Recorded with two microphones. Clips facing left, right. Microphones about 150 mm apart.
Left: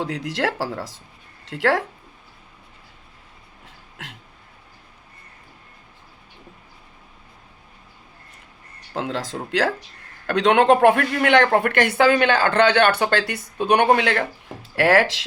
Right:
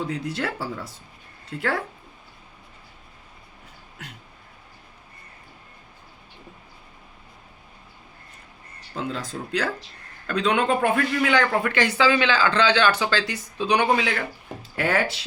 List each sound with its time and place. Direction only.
0.0 s speech: 90° left
3.9 s speech: 90° left
9.0 s a man's voice: 90° left
10.8 s speech: 60° left (ahead or behind)
14.8 s speech: 90° left